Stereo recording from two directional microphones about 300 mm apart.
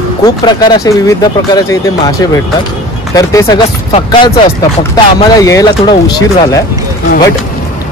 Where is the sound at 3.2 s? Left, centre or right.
Centre.